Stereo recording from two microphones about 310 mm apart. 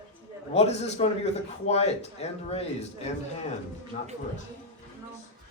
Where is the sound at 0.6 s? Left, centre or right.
Left.